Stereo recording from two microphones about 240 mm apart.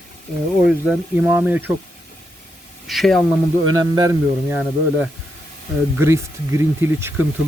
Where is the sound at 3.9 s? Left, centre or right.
Centre.